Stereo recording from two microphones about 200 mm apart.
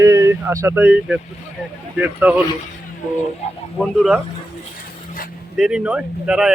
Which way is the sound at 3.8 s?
5° right (ahead or behind).